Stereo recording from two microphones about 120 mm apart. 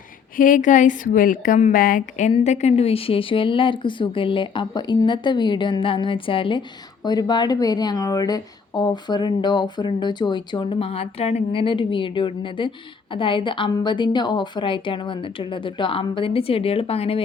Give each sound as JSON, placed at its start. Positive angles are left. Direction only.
{"t": 0.4, "sound": "a woman's voice", "side_deg": 90}
{"t": 2.4, "sound": "speech", "side_deg": 70}
{"t": 7.0, "sound": "speech", "side_deg": 35}